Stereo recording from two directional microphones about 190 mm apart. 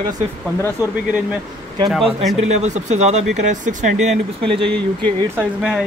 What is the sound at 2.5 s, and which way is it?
Speech, 35° right (ahead or behind).